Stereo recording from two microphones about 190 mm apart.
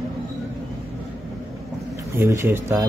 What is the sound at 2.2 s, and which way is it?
Speech, 15° right (ahead or behind).